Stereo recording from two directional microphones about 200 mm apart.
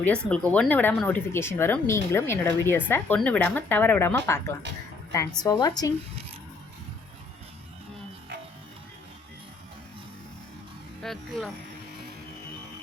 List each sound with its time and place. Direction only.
0.0 s a woman's voice: 5° left (ahead or behind)
11.0 s speech: centre (ahead or behind)